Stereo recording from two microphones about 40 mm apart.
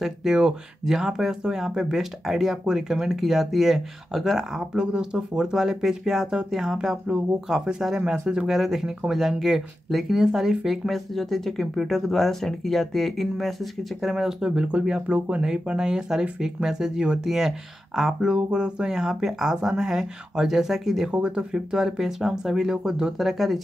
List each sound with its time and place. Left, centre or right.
0.0 s speech: centre
8.5 s speech: centre
10.7 s speech: centre
14.1 s speech: centre
15.1 s speech: right
15.4 s speech: right
21.1 s speech: right
23.1 s speech: centre